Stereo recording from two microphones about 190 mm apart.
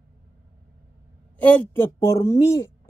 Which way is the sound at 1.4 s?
10° left (ahead or behind).